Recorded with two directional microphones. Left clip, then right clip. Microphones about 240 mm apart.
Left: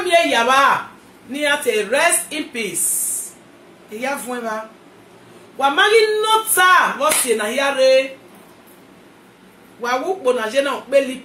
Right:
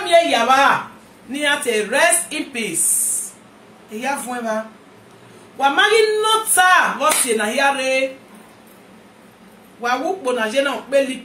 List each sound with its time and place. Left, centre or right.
0.1 s a woman's voice: centre
5.6 s speech: centre
9.8 s speech: centre